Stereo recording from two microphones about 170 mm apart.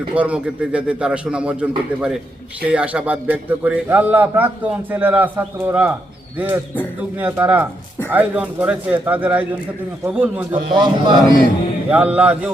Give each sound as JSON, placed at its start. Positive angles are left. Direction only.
{"t": 0.1, "sound": "a man's voice", "side_deg": -10}
{"t": 7.2, "sound": "a man's voice", "side_deg": -10}
{"t": 10.5, "sound": "a man's voice", "side_deg": -30}
{"t": 11.9, "sound": "a man's voice", "side_deg": -10}